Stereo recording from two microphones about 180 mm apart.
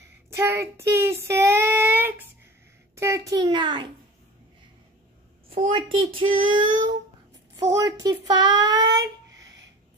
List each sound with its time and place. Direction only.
0.3 s child singing: 15° right (ahead or behind)
3.0 s a child's voice: 15° right (ahead or behind)
5.7 s a child's voice: 30° right (ahead or behind)
8.9 s a sound: 20° right (ahead or behind)